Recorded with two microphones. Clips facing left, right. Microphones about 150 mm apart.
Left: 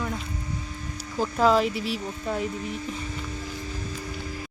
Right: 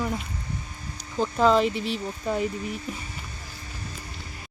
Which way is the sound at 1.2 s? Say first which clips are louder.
Right 1 dB; 5° left (ahead or behind).